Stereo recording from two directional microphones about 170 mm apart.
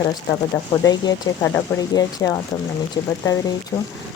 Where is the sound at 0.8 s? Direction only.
20° left (ahead or behind).